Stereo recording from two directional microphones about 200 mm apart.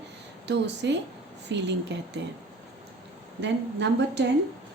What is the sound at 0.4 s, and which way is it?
A woman's voice, 60° right (ahead or behind).